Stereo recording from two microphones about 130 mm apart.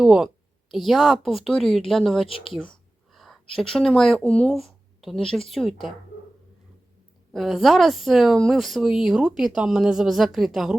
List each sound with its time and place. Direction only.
0.0 s a woman's voice: 5° right (ahead or behind)
2.2 s speech: 45° left (ahead or behind)
3.5 s a woman's voice: 5° left (ahead or behind)
7.3 s a woman's voice: centre (ahead or behind)